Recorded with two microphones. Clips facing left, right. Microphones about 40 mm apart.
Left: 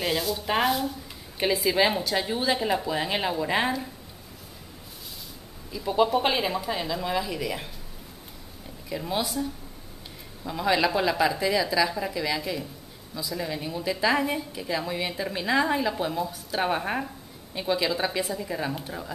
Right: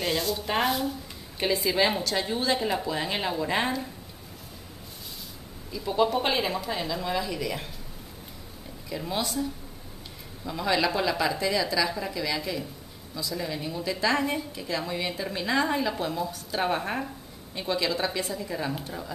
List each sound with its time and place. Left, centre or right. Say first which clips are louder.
0.0 s a woman's voice: left 1 dB; centre
5.7 s a woman's voice: left 2 dB; centre
8.8 s a woman's voice: left 2 dB; centre